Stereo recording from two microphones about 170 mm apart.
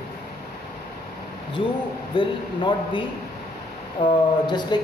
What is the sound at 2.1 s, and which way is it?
Speech, 30° left (ahead or behind).